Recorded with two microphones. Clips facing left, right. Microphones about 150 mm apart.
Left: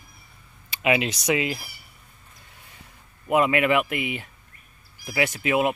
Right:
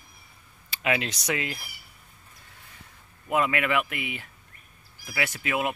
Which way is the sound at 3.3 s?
20° left (ahead or behind).